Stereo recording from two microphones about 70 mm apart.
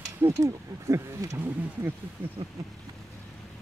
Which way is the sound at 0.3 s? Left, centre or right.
Right.